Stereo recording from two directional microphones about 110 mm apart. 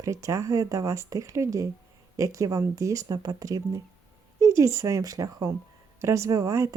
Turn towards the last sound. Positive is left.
turn(degrees=-30)  # may be behind; listen again after turning